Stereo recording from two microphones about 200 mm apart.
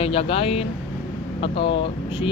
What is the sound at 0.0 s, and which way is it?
Speech, 30° left (ahead or behind).